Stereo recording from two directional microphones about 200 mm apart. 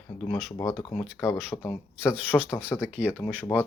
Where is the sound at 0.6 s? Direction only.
20° left (ahead or behind).